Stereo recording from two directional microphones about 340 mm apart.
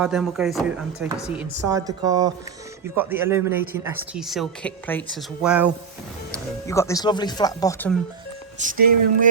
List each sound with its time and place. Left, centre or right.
0.0 s speech: centre
6.3 s speech: centre
8.7 s a sound: right